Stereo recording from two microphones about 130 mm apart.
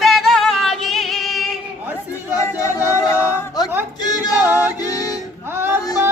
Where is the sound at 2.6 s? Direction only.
25° left (ahead or behind).